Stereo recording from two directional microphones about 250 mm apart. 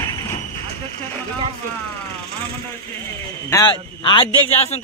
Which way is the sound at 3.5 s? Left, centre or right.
Centre.